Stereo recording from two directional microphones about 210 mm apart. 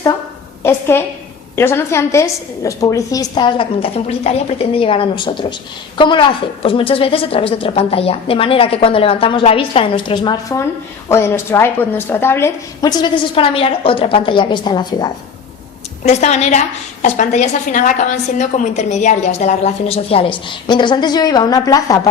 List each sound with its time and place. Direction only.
0.6 s a woman's voice: 10° left (ahead or behind)
16.0 s a woman's voice: 35° left (ahead or behind); by 22.1 s 15° left (ahead or behind)